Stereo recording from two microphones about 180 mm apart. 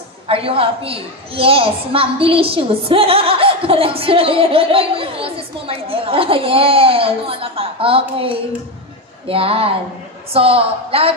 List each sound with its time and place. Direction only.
0.3 s a woman's voice: 30° right (ahead or behind)